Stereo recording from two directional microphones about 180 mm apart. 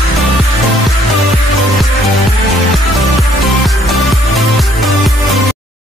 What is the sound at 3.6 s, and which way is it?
Music, centre (ahead or behind).